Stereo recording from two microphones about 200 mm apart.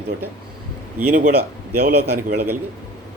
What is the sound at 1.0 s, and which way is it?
A man's voice, 45° right (ahead or behind).